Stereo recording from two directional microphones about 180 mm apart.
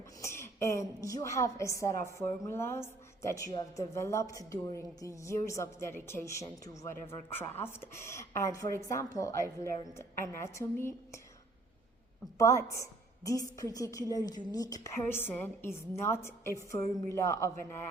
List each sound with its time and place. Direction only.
0.2 s a woman's voice: 15° left (ahead or behind)
12.4 s a woman's voice: 15° left (ahead or behind)